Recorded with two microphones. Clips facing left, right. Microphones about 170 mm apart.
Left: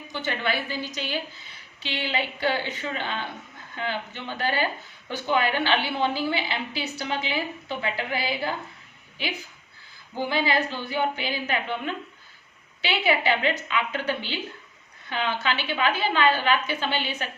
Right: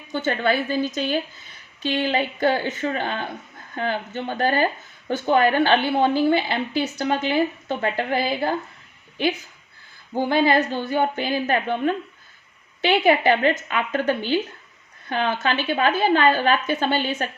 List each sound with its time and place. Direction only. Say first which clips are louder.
0.1 s speech: right 7 dB; 50° right (ahead or behind)
10.2 s speech: right 6 dB; 50° right (ahead or behind)